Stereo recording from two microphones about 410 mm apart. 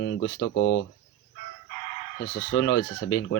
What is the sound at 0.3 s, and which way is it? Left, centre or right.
Speech, left.